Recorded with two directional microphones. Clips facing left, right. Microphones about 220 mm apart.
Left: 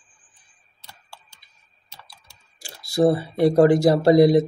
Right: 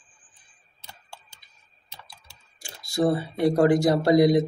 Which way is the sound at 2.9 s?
35° left (ahead or behind).